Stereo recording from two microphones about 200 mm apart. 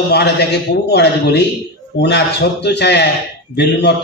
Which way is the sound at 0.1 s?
55° left (ahead or behind).